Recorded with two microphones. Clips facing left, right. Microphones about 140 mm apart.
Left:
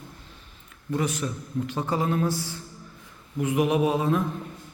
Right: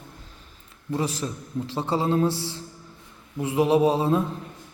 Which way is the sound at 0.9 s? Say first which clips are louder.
Even; 30° right (ahead or behind).